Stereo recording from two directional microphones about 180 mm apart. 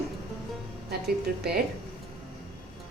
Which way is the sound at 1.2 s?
60° right (ahead or behind).